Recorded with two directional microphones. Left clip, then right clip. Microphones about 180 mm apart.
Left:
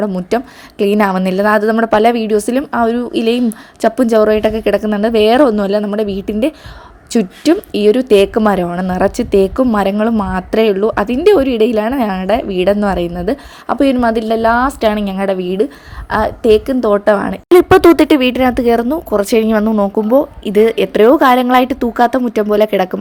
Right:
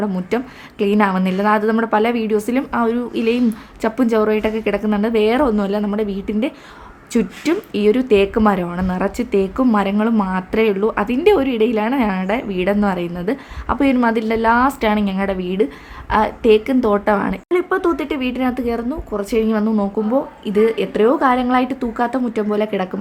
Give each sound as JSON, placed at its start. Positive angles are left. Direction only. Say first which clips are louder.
{"t": 0.0, "sound": "a woman's voice", "louder": "left 5 dB", "side_deg": 30}
{"t": 17.5, "sound": "speech", "louder": "left 12 dB", "side_deg": 50}